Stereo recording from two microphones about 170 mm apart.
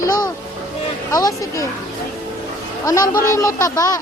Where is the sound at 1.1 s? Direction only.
20° left (ahead or behind).